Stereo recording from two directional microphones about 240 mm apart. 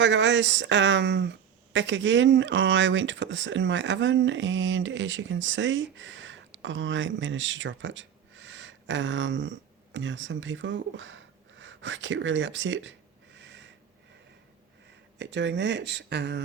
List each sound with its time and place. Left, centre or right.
0.0 s speech: right
13.3 s a sound: right
15.2 s speech: right